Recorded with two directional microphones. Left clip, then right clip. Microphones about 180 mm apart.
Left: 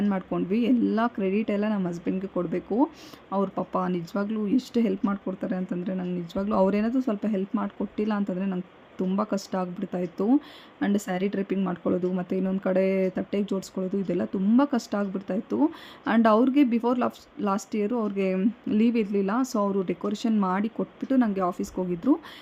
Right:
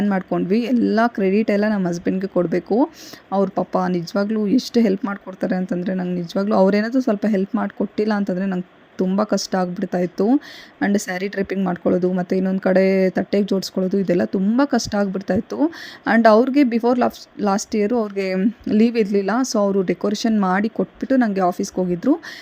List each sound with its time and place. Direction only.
0.0 s speech: 20° right (ahead or behind)